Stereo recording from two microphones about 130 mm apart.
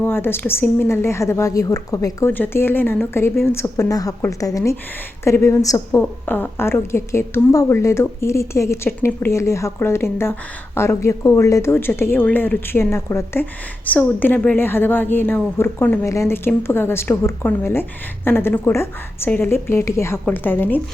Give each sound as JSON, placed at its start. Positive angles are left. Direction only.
{"t": 0.0, "sound": "a woman's voice", "side_deg": 15}